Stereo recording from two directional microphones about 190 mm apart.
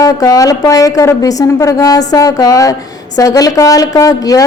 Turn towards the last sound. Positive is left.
turn(degrees=20)  # may be behind; listen again after turning